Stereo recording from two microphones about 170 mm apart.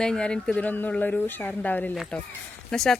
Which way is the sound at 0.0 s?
5° left (ahead or behind).